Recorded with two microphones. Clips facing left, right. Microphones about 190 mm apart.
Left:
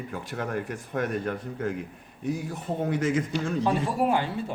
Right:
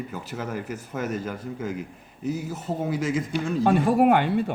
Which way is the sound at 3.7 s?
60° right (ahead or behind).